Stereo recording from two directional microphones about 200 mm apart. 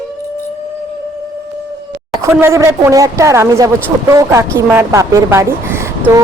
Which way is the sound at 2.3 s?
10° right (ahead or behind).